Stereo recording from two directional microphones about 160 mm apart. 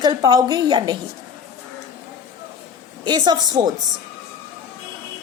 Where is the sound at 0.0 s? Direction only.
25° right (ahead or behind).